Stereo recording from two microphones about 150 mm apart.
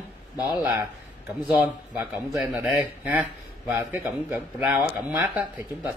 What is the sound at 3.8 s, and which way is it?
Speech, 15° right (ahead or behind).